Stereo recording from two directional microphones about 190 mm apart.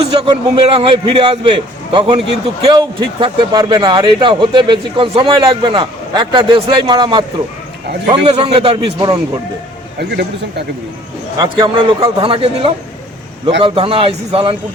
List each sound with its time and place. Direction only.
0.0 s a man's voice: 30° right (ahead or behind)
11.4 s a man's voice: 25° right (ahead or behind)